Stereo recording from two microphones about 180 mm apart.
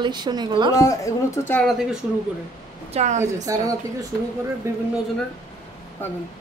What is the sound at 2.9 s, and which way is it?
Speech, 40° right (ahead or behind).